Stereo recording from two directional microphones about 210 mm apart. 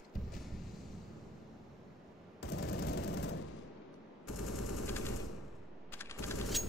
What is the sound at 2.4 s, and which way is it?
Machine gun, 50° left (ahead or behind).